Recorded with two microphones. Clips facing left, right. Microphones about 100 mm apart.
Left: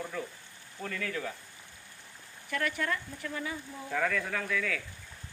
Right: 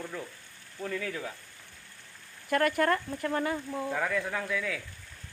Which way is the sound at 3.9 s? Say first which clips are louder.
Left 1 dB; 15° right (ahead or behind).